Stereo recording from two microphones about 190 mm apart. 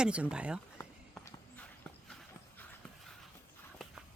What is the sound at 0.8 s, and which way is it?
Walk, 10° left (ahead or behind).